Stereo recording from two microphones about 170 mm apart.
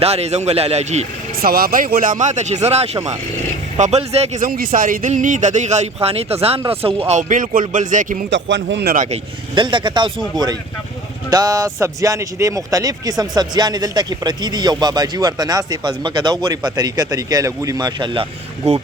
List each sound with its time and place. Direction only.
0.0 s a man's voice: 35° right (ahead or behind)
1.4 s speech: 65° right (ahead or behind); by 4.4 s 40° right (ahead or behind)
4.4 s speech: 60° right (ahead or behind); by 6.6 s 35° right (ahead or behind)
7.1 s speech: 45° right (ahead or behind)
8.3 s speech: 90° right
9.6 s speech: 30° right (ahead or behind)